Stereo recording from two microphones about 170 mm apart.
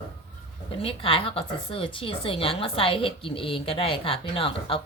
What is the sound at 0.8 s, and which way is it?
A woman's voice, 35° left (ahead or behind).